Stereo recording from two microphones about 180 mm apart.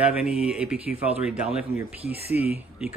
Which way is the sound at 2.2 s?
35° left (ahead or behind).